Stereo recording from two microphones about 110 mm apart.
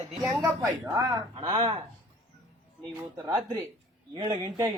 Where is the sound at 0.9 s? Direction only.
35° right (ahead or behind).